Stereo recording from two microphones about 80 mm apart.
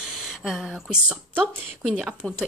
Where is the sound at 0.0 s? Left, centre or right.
Centre.